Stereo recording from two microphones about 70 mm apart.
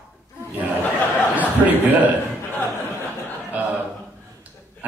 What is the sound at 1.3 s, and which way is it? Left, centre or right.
Speech, right.